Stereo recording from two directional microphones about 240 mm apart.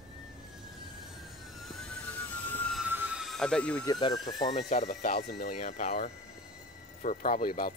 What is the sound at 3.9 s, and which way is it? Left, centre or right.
Speech, centre.